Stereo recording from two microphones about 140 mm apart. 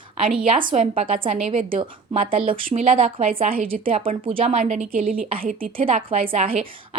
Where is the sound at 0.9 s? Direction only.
40° right (ahead or behind).